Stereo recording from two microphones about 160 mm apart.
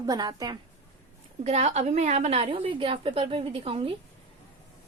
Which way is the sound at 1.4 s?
45° right (ahead or behind).